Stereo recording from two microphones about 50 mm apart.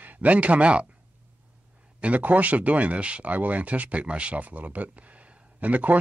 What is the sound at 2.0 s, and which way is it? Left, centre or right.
Speech, right.